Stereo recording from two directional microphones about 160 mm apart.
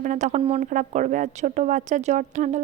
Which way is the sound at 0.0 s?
50° right (ahead or behind).